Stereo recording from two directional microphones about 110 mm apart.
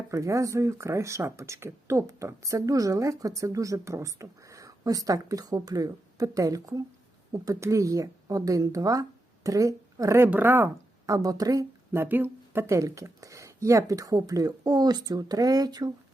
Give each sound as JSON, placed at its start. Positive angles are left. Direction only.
{"t": 0.1, "sound": "speech", "side_deg": -30}
{"t": 11.0, "sound": "a woman's voice", "side_deg": -30}
{"t": 11.9, "sound": "speech", "side_deg": -20}